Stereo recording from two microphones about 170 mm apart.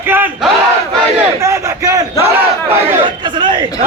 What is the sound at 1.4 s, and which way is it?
Crowd, 20° right (ahead or behind).